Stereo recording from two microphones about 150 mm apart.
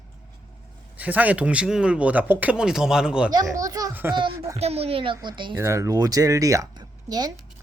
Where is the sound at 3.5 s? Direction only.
20° right (ahead or behind).